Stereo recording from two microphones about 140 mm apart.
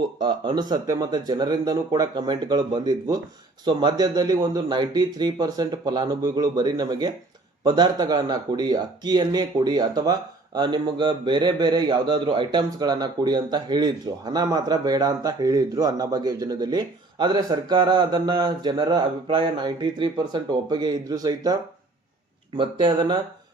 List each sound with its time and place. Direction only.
0.2 s speech: 35° right (ahead or behind)